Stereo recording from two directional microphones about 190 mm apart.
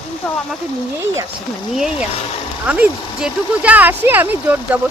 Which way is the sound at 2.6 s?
5° right (ahead or behind).